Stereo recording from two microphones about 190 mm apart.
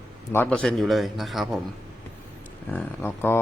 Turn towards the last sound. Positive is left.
turn(degrees=10)  # may be behind; listen again after turning